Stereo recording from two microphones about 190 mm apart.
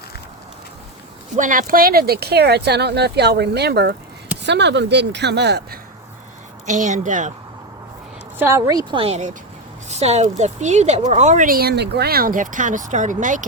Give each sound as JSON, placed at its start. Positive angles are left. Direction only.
{"t": 1.4, "sound": "speech", "side_deg": -45}
{"t": 6.7, "sound": "speech", "side_deg": -40}
{"t": 8.4, "sound": "speech", "side_deg": -15}